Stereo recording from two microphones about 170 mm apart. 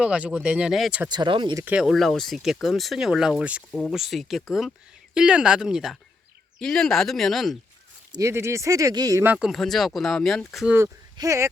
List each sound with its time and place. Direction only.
0.0 s speech: 5° right (ahead or behind)
1.1 s speech: 25° right (ahead or behind)
1.6 s speech: 5° right (ahead or behind)
3.7 s speech: 5° left (ahead or behind)
8.1 s speech: 15° right (ahead or behind)
9.5 s speech: centre (ahead or behind)
10.8 s speech: 15° right (ahead or behind)